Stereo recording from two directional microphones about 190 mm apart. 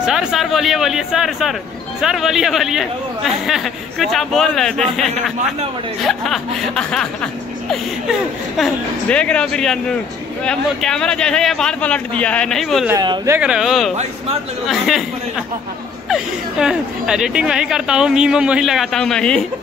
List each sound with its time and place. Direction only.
0.0 s speech: 5° right (ahead or behind)
12.9 s speech: 20° right (ahead or behind)
13.4 s speech: 5° right (ahead or behind)
16.1 s speech: 5° right (ahead or behind)